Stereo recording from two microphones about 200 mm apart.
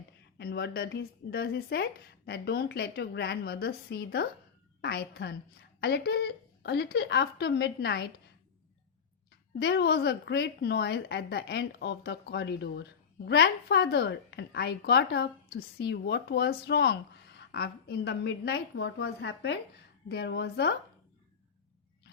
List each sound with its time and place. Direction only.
0.3 s speech: 55° left (ahead or behind)
9.6 s a woman's voice: 55° left (ahead or behind)